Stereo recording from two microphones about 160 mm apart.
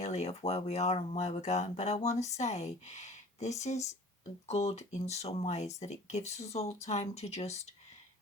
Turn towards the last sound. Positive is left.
turn(degrees=40)  # may be behind; listen again after turning